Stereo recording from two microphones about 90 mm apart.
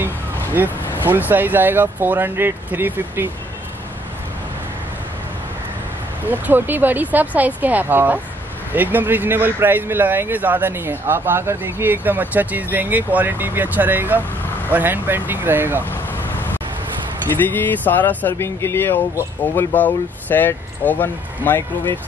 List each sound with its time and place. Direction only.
0.6 s speech: 20° right (ahead or behind)
6.2 s speech: 20° right (ahead or behind)
15.8 s vehicle: 25° left (ahead or behind)
17.5 s speech: 20° left (ahead or behind)